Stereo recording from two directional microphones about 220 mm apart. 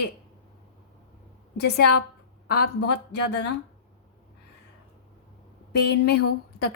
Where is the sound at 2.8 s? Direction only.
50° left (ahead or behind).